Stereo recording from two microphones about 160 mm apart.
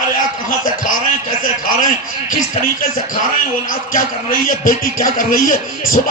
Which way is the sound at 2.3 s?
60° left (ahead or behind).